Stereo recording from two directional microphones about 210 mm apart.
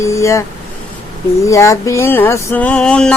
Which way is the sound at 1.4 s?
15° left (ahead or behind).